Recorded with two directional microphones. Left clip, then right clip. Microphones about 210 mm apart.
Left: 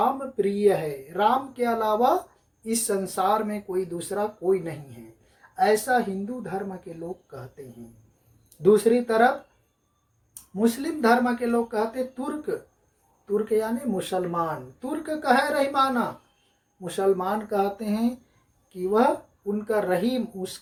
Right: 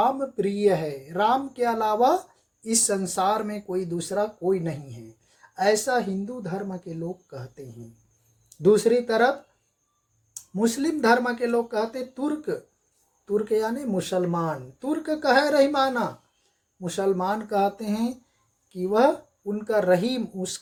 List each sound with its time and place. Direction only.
0.4 s speech: 45° right (ahead or behind)
10.5 s speech: 50° right (ahead or behind)